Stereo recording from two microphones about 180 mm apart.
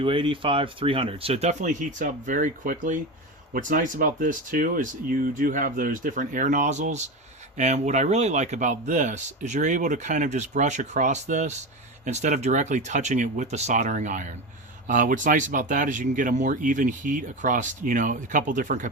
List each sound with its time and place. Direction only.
0.0 s speech: 30° right (ahead or behind); by 18.9 s 45° right (ahead or behind)